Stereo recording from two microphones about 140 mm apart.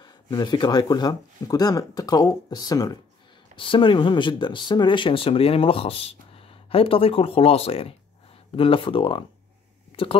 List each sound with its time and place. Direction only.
0.0 s speech: 30° left (ahead or behind)
3.5 s speech: 35° left (ahead or behind)